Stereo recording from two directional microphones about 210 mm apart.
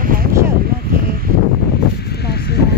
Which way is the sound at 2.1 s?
50° left (ahead or behind).